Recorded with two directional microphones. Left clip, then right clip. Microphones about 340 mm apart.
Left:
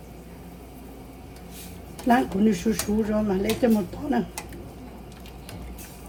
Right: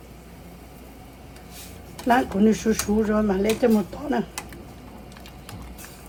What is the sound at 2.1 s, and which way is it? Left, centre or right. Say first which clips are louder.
Speech: right 2 dB; right.